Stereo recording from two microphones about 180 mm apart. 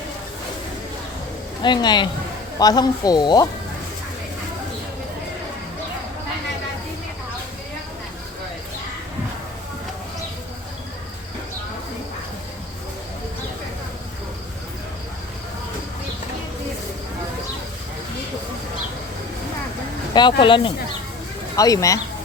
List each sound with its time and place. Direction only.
1.6 s speech: 25° left (ahead or behind)
20.1 s speech: 25° left (ahead or behind)